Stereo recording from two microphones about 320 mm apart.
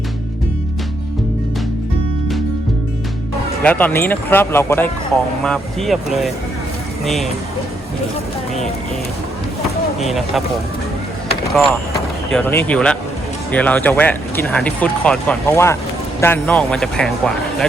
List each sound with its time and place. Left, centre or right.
3.6 s speech: centre
10.1 s speech: centre
12.3 s speech: centre